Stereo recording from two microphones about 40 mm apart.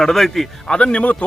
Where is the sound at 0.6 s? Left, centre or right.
Left.